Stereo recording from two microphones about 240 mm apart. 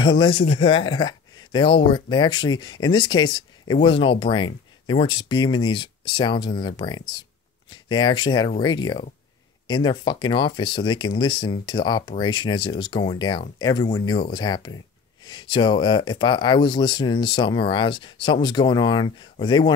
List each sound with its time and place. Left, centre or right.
0.0 s speech: centre